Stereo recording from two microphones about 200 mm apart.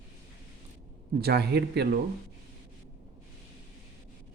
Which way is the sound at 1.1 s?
50° right (ahead or behind).